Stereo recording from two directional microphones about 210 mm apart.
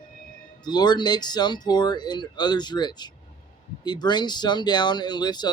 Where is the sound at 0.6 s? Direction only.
20° left (ahead or behind).